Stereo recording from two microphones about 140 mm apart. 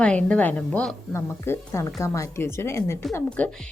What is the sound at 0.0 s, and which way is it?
Speech, 10° left (ahead or behind).